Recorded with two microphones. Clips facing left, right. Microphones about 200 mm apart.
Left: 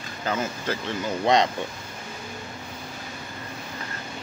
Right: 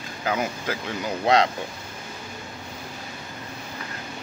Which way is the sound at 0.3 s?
10° right (ahead or behind).